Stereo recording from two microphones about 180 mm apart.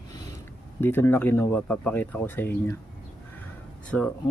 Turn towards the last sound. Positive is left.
turn(degrees=5)  # may be behind; listen again after turning